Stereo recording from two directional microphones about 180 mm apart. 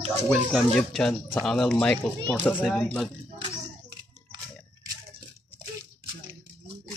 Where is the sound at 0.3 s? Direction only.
Centre (ahead or behind).